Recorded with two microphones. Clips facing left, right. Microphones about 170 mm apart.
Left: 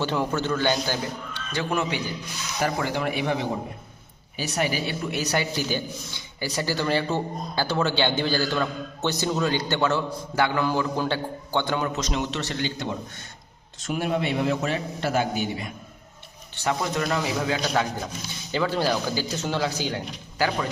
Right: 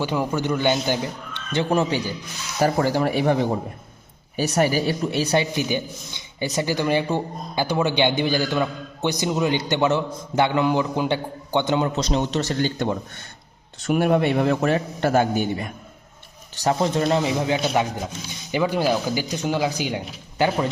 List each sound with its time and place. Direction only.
0.0 s a woman's voice: 10° right (ahead or behind)
11.9 s a man's voice: 35° right (ahead or behind); by 13.0 s 50° right (ahead or behind)
13.7 s a man's voice: 60° right (ahead or behind)
16.6 s a man's voice: 30° right (ahead or behind)